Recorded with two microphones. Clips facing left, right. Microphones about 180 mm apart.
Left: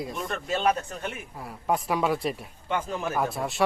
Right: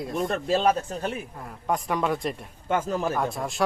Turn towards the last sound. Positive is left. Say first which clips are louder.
# even
turn(degrees=0)  # may be behind; listen again after turning